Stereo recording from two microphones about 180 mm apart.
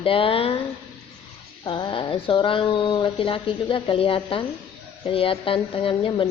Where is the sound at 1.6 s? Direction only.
25° left (ahead or behind).